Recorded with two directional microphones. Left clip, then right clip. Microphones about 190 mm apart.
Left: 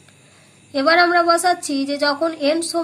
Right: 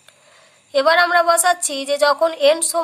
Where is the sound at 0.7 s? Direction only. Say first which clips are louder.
Right 1 dB; 40° right (ahead or behind).